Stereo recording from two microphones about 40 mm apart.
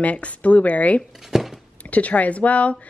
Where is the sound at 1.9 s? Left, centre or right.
Left.